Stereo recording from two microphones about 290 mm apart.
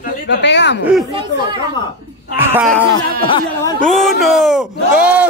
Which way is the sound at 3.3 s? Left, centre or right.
Centre.